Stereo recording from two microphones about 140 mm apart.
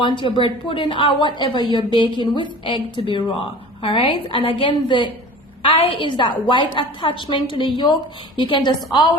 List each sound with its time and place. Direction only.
0.2 s a woman's voice: 35° left (ahead or behind)